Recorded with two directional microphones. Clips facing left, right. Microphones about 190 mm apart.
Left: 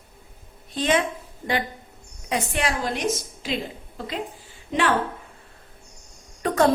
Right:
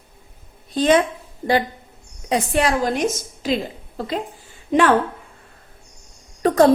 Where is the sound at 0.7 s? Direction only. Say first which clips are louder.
Right 7 dB; 35° right (ahead or behind).